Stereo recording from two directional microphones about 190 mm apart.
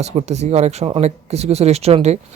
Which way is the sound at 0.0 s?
35° right (ahead or behind).